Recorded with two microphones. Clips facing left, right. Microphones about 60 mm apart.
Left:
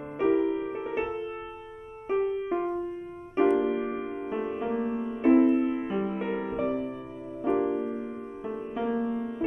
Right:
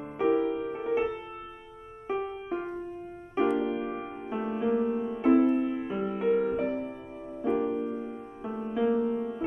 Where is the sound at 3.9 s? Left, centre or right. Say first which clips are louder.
Left 3 dB; left.